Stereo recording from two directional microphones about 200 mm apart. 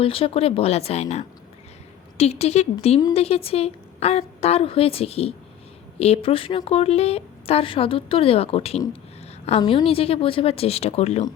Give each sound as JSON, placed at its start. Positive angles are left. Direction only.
{"t": 0.0, "sound": "a woman's voice", "side_deg": 30}